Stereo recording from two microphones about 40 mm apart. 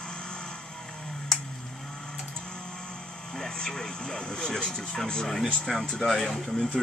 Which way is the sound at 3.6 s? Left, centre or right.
Centre.